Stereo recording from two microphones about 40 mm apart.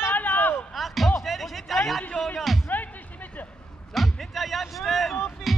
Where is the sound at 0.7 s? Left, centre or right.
Centre.